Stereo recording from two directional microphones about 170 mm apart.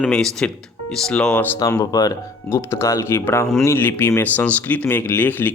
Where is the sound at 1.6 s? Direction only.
20° left (ahead or behind).